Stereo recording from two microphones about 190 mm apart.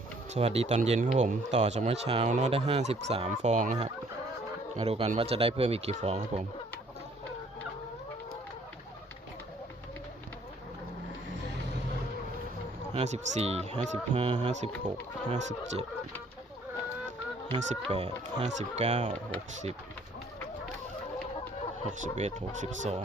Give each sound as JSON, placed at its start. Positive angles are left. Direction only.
{"t": 0.3, "sound": "speech", "side_deg": -30}
{"t": 12.9, "sound": "speech", "side_deg": -35}
{"t": 17.7, "sound": "speech", "side_deg": -35}
{"t": 22.0, "sound": "speech", "side_deg": -40}